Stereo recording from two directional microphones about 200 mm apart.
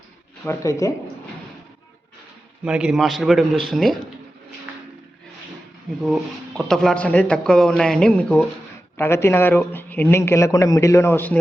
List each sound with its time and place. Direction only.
0.4 s speech: 15° left (ahead or behind)
2.6 s speech: 5° right (ahead or behind)
6.6 s speech: centre (ahead or behind)